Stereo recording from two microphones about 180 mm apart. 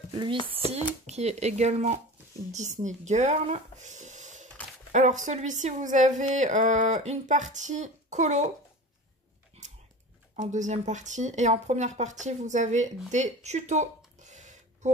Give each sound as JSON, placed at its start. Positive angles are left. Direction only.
{"t": 0.1, "sound": "speech", "side_deg": -30}
{"t": 10.3, "sound": "speech", "side_deg": -40}
{"t": 13.1, "sound": "a sound", "side_deg": -40}